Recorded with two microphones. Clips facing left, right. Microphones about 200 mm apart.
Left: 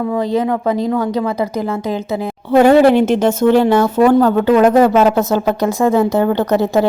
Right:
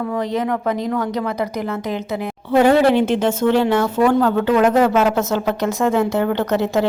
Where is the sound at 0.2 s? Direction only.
30° left (ahead or behind).